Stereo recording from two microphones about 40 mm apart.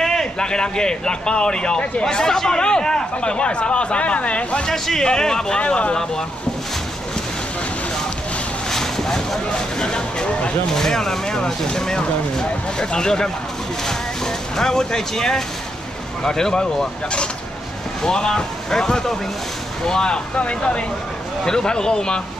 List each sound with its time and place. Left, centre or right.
0.0 s a man's voice: centre; by 4.6 s left
4.6 s speech: centre
5.6 s speech: left
8.6 s vehicle: centre
9.5 s a sound: left
10.8 s speech: centre
13.8 s vehicle: centre
16.3 s speech: centre
18.0 s speech: centre
20.3 s speech: left
21.5 s speech: centre